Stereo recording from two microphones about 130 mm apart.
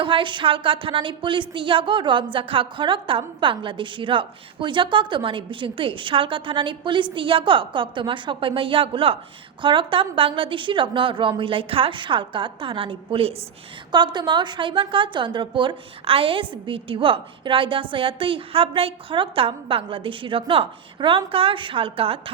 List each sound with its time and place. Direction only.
0.0 s a woman's voice: 40° right (ahead or behind)
13.9 s a woman's voice: 35° right (ahead or behind)